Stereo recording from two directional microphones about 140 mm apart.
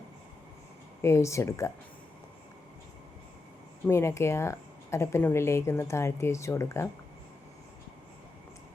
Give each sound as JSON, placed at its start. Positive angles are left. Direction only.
{"t": 1.0, "sound": "speech", "side_deg": 20}
{"t": 3.8, "sound": "speech", "side_deg": 20}